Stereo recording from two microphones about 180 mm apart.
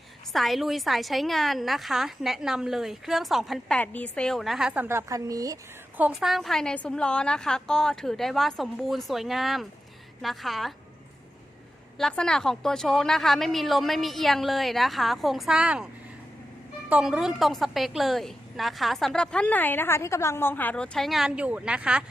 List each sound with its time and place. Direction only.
0.3 s a woman's voice: centre (ahead or behind); by 5.5 s 20° right (ahead or behind)
6.0 s a woman's voice: 5° right (ahead or behind)
11.9 s a woman's voice: 5° left (ahead or behind)
16.9 s a woman's voice: 5° right (ahead or behind)